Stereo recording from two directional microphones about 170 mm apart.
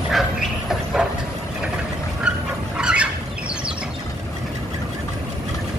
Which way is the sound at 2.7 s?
5° right (ahead or behind).